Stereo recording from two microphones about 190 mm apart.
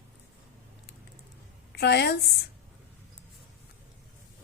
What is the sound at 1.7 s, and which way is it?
Speech, 60° left (ahead or behind).